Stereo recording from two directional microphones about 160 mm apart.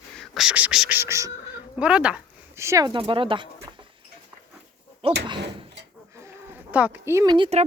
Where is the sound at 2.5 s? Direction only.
20° right (ahead or behind).